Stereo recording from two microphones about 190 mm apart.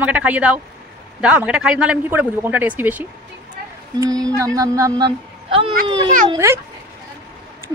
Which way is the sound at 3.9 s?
20° right (ahead or behind).